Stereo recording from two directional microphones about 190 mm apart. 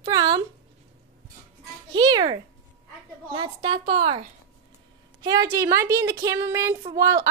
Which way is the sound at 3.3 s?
25° right (ahead or behind).